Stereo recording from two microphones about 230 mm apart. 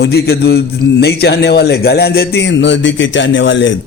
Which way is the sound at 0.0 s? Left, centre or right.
Left.